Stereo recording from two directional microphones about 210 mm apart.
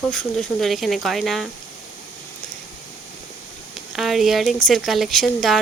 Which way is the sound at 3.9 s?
Centre (ahead or behind).